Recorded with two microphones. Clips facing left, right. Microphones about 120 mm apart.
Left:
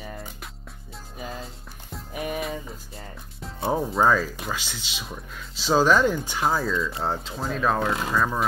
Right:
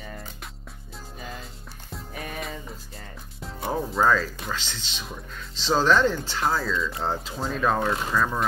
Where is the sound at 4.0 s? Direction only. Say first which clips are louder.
Even; 10° left (ahead or behind).